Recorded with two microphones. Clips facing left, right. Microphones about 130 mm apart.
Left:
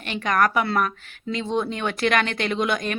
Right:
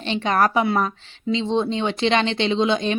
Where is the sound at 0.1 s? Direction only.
30° right (ahead or behind).